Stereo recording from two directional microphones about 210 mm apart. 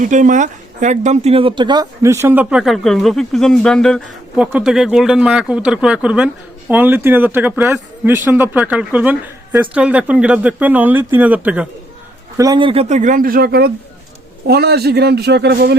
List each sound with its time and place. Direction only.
0.0 s speech: 35° right (ahead or behind); by 11.7 s 5° right (ahead or behind)
12.4 s a man's voice: 20° right (ahead or behind); by 15.7 s 50° right (ahead or behind)